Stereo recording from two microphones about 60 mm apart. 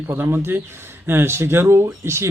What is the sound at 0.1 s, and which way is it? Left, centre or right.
Speech, right.